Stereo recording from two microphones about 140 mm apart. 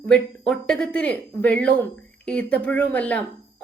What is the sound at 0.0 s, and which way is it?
Speech, 5° left (ahead or behind).